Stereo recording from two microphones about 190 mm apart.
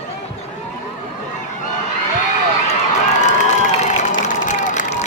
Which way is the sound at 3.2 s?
40° left (ahead or behind).